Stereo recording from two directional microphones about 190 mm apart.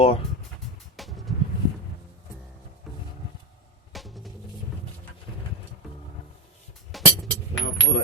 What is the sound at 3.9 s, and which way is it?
Music, centre (ahead or behind).